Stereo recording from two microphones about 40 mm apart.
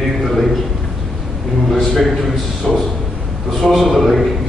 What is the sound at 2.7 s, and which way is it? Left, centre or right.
Speech, centre.